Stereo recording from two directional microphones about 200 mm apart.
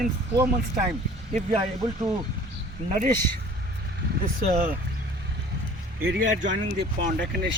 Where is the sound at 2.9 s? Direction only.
35° right (ahead or behind).